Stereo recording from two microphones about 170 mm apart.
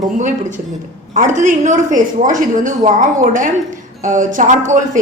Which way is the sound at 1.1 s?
45° right (ahead or behind).